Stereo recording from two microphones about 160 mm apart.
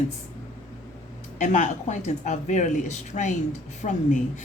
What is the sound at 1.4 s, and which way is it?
Speech, 50° left (ahead or behind).